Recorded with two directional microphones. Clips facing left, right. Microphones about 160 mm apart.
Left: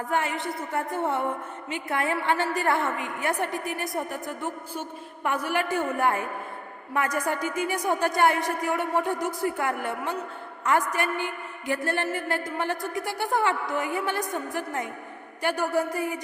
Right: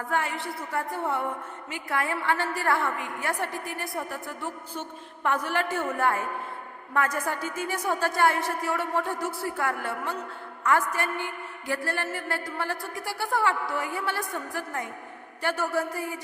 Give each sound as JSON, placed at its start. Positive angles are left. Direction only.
{"t": 0.1, "sound": "a woman's voice", "side_deg": 20}